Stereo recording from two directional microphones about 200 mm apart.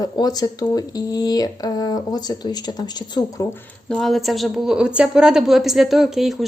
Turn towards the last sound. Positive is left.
turn(degrees=0)  # may be behind; listen again after turning